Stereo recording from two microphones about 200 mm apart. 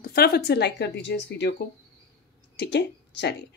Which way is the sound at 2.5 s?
60° left (ahead or behind).